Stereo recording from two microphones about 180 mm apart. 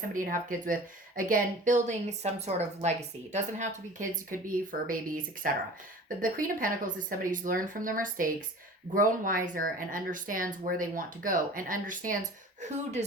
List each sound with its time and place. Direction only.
0.1 s speech: 50° right (ahead or behind)